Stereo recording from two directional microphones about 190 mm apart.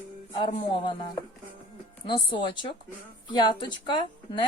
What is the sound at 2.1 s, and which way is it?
Speech, 25° left (ahead or behind).